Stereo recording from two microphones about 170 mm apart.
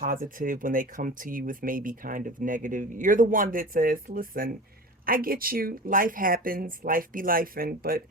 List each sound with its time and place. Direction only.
0.0 s speech: 55° right (ahead or behind)